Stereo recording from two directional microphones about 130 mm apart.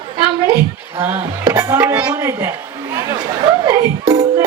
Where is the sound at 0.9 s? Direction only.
20° right (ahead or behind).